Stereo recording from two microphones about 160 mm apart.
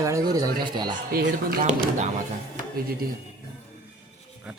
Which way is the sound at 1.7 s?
50° right (ahead or behind).